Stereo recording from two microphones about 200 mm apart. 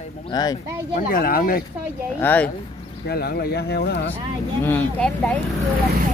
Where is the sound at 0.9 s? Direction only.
45° left (ahead or behind).